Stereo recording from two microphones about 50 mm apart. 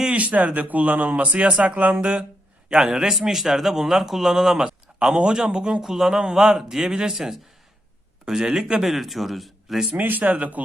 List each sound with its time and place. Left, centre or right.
0.0 s a man's voice: right
8.9 s speech: centre
10.0 s speech: right